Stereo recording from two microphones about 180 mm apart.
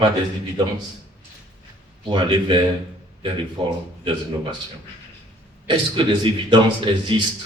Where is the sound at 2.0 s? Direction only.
25° right (ahead or behind).